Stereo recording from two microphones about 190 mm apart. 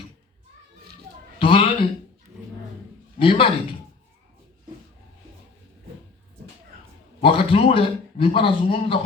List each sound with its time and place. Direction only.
1.4 s a sound: 30° left (ahead or behind)
3.2 s speech: 30° left (ahead or behind)
7.2 s a man's voice: 30° left (ahead or behind)